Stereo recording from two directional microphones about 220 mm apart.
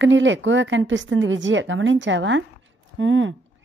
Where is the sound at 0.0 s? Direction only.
55° right (ahead or behind).